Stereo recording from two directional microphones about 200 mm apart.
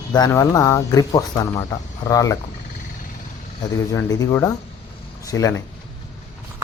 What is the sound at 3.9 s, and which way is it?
Speech, 20° left (ahead or behind).